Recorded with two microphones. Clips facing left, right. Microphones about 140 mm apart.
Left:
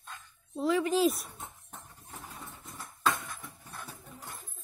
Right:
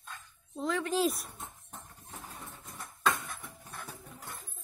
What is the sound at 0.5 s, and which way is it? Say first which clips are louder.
Speech: left 4 dB; 5° left (ahead or behind).